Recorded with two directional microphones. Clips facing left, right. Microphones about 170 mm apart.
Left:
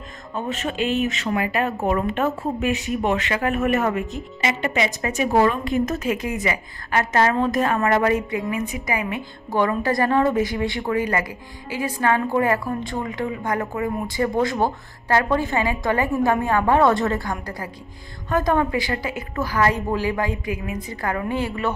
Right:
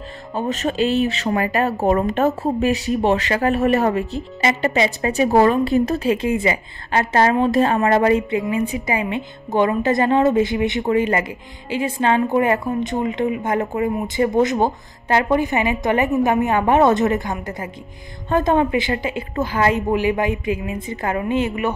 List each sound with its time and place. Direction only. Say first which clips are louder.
0.3 s a woman's voice: right 4 dB; 35° right (ahead or behind); by 21.7 s 20° right (ahead or behind)